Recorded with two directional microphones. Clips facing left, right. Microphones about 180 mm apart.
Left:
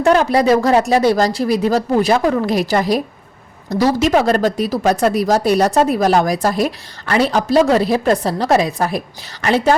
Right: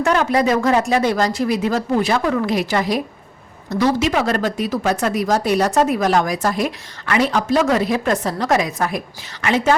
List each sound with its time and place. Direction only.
0.0 s speech: 35° left (ahead or behind)